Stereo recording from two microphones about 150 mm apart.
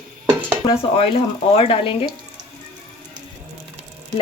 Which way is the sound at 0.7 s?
40° left (ahead or behind).